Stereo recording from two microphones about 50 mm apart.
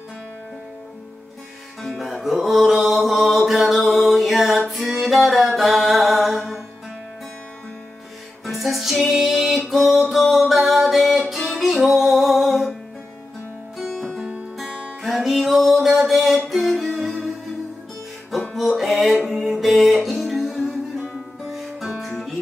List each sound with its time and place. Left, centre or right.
1.8 s music: centre
8.5 s music: centre
13.9 s music: centre
14.7 s music: centre
15.0 s music: centre
18.5 s music: centre